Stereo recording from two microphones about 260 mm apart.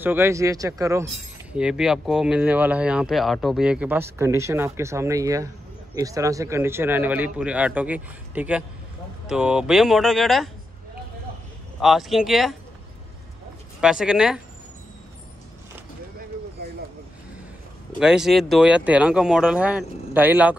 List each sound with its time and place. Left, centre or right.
0.0 s speech: centre
11.8 s speech: centre
13.7 s speech: centre
17.9 s speech: centre